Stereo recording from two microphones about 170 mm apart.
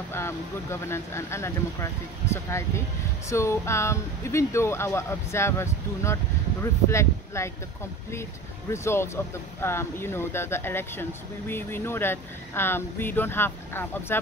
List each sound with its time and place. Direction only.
0.1 s speech: 15° left (ahead or behind)
8.7 s speech: 15° left (ahead or behind)